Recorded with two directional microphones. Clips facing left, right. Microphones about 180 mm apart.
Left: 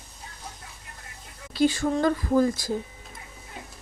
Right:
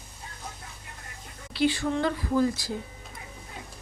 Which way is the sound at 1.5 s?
45° left (ahead or behind).